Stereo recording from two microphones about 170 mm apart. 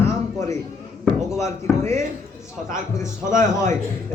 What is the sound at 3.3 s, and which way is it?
Speech, 45° right (ahead or behind).